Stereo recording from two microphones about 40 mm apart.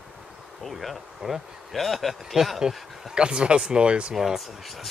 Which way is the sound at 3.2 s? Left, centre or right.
Right.